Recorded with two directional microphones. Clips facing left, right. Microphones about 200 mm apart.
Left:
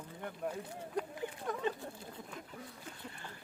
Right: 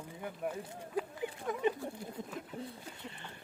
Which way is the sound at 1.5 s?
15° right (ahead or behind).